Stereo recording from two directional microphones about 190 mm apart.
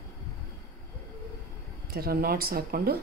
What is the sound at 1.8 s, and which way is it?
Speech, 55° right (ahead or behind).